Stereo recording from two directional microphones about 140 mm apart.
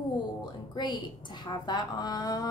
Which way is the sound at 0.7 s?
30° left (ahead or behind).